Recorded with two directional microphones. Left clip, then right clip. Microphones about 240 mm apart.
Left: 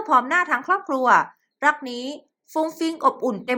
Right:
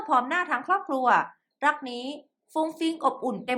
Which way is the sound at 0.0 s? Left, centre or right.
Centre.